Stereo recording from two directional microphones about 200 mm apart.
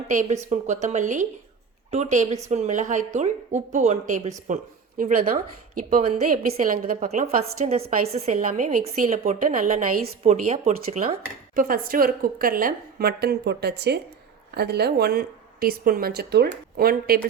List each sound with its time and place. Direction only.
0.1 s a woman's voice: 40° right (ahead or behind)
11.5 s a woman's voice: 45° right (ahead or behind)